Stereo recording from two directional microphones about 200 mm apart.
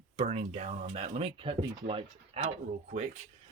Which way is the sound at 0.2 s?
30° right (ahead or behind).